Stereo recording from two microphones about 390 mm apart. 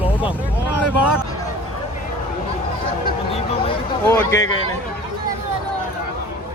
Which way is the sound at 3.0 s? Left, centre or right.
Centre.